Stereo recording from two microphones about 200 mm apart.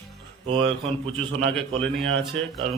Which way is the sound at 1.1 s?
Centre (ahead or behind).